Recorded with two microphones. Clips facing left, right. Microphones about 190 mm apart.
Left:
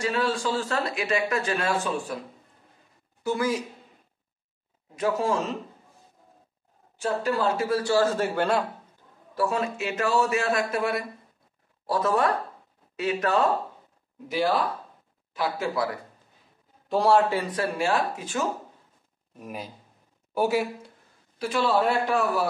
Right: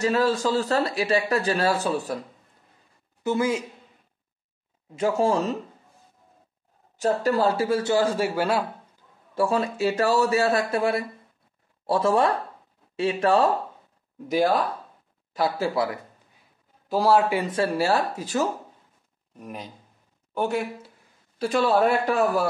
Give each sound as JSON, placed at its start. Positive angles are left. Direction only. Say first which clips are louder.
{"t": 0.0, "sound": "a man's voice", "louder": "right 4 dB", "side_deg": -40}
{"t": 3.3, "sound": "a man's voice", "louder": "right 2 dB", "side_deg": -25}
{"t": 4.9, "sound": "a man's voice", "louder": "right 3 dB", "side_deg": -30}
{"t": 7.0, "sound": "a man's voice", "louder": "right 4 dB", "side_deg": -40}
{"t": 9.3, "sound": "a man's voice", "louder": "right 3 dB", "side_deg": -30}
{"t": 14.2, "sound": "a man's voice", "louder": "right 3 dB", "side_deg": -45}
{"t": 16.9, "sound": "speech", "louder": "right 1 dB", "side_deg": -5}
{"t": 17.3, "sound": "a man's voice", "louder": "right 3 dB", "side_deg": -20}
{"t": 19.3, "sound": "speech", "louder": "even", "side_deg": 5}
{"t": 21.4, "sound": "a man's voice", "louder": "right 3 dB", "side_deg": -50}